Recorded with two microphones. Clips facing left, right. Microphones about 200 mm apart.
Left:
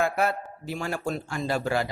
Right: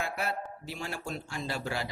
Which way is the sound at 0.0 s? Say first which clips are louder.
Left 9 dB; 50° left (ahead or behind).